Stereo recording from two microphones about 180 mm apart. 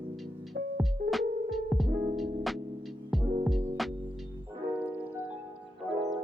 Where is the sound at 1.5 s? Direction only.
Centre (ahead or behind).